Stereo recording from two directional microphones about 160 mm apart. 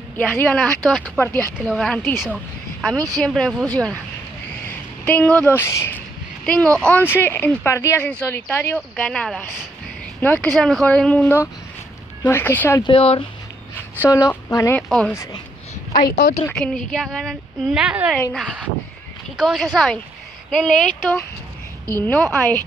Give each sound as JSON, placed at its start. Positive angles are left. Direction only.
{"t": 0.2, "sound": "a woman's voice", "side_deg": 10}
{"t": 4.6, "sound": "a sound", "side_deg": 10}
{"t": 6.8, "sound": "speech", "side_deg": 10}
{"t": 12.8, "sound": "speech", "side_deg": 35}
{"t": 13.7, "sound": "speech", "side_deg": 15}
{"t": 14.8, "sound": "speech", "side_deg": 5}
{"t": 15.9, "sound": "speech", "side_deg": 60}
{"t": 16.4, "sound": "speech", "side_deg": 5}